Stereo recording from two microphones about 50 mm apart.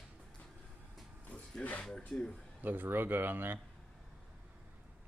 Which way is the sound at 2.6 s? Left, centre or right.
Right.